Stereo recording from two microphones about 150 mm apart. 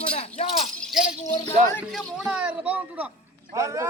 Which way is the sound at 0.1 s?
45° left (ahead or behind).